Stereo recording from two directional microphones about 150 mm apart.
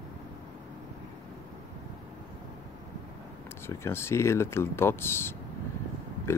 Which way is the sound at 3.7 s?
15° left (ahead or behind).